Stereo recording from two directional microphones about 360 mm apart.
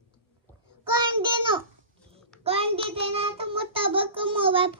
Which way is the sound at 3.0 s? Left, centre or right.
Centre.